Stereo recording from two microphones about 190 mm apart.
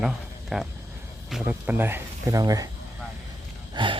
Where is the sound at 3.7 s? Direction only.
25° right (ahead or behind).